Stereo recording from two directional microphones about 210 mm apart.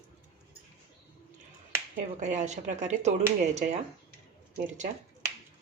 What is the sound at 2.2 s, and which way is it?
Speech, 35° right (ahead or behind).